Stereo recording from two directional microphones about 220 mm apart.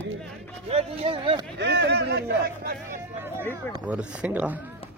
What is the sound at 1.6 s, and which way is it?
Speech, 50° right (ahead or behind).